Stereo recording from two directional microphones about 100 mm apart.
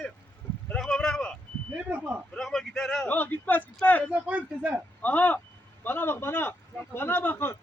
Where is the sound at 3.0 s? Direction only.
20° left (ahead or behind).